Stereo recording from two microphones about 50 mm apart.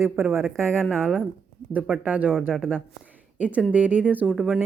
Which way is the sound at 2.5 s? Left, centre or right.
Centre.